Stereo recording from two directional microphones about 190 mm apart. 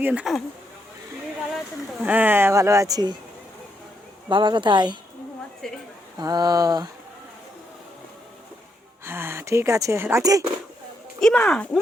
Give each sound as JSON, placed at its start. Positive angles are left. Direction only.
{"t": 0.0, "sound": "speech", "side_deg": -5}
{"t": 2.0, "sound": "speech", "side_deg": -10}
{"t": 4.3, "sound": "speech", "side_deg": -25}
{"t": 5.6, "sound": "speech", "side_deg": 5}
{"t": 6.1, "sound": "speech", "side_deg": -20}
{"t": 9.0, "sound": "speech", "side_deg": -15}
{"t": 11.2, "sound": "speech", "side_deg": 5}